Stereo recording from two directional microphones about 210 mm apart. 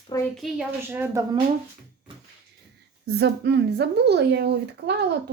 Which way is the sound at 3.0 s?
50° right (ahead or behind).